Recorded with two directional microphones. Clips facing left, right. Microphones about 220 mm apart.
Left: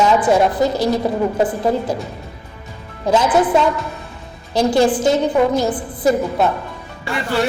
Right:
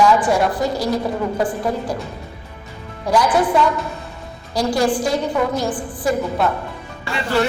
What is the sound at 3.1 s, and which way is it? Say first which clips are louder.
Speech: left 2 dB; 20° left (ahead or behind).